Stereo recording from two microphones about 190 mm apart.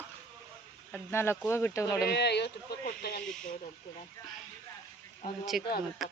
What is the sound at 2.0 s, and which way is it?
Speech, 60° left (ahead or behind).